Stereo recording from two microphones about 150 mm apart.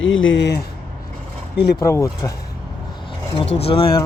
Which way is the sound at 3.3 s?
40° left (ahead or behind).